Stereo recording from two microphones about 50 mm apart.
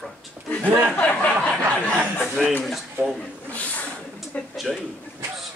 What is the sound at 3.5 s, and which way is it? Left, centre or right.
Speech, left.